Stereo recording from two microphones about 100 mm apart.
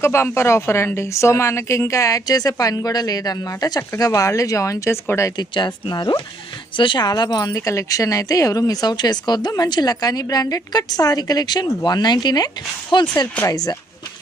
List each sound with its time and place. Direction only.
0.0 s a woman's voice: 25° left (ahead or behind)
5.4 s a woman's voice: 50° left (ahead or behind)
13.4 s a woman's voice: 40° left (ahead or behind)